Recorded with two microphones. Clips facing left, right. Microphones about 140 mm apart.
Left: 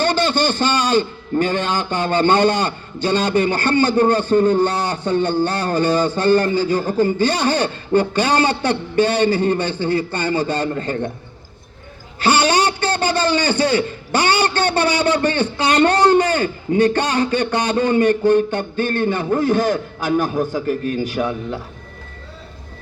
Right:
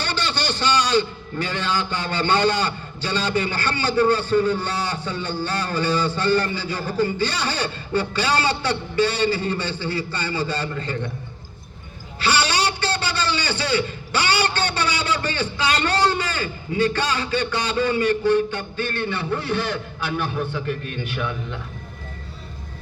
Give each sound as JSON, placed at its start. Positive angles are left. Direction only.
{"t": 0.0, "sound": "a man's voice", "side_deg": 45}
{"t": 12.2, "sound": "a man's voice", "side_deg": 50}